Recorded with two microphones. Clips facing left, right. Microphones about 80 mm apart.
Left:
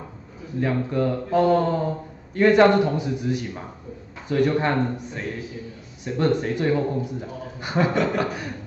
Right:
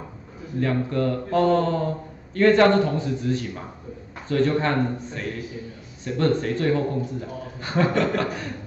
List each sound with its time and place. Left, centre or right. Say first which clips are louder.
0.6 s a man's voice: even; centre